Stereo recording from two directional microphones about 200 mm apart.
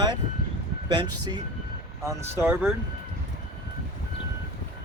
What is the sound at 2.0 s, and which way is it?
Speech, 10° right (ahead or behind).